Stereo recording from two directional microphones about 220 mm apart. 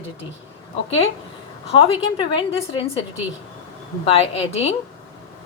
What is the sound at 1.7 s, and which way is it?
Speech, 25° left (ahead or behind).